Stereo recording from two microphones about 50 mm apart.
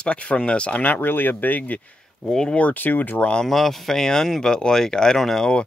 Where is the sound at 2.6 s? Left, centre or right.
Left.